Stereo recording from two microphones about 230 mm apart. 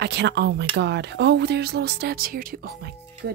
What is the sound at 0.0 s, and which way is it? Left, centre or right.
Speech, right.